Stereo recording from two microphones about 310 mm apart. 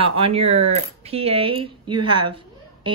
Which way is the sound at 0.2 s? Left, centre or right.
Centre.